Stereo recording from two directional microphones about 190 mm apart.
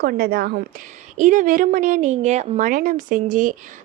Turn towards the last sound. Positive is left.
turn(degrees=-45)  # may be behind; listen again after turning